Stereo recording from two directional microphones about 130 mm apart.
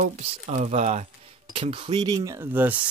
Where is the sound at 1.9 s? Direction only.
30° right (ahead or behind).